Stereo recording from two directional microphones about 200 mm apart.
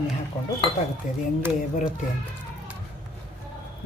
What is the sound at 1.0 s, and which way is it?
Speech, 40° left (ahead or behind).